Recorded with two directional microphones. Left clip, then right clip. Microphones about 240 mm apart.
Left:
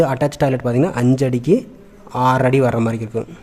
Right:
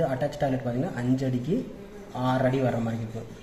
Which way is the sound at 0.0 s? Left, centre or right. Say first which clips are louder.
Left 10 dB; left.